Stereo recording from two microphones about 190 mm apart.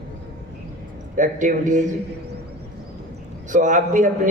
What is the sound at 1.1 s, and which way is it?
Speech, 45° right (ahead or behind).